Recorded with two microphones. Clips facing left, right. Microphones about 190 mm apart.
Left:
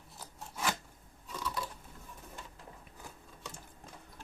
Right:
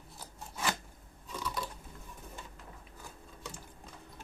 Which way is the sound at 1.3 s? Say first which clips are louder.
Even; centre (ahead or behind).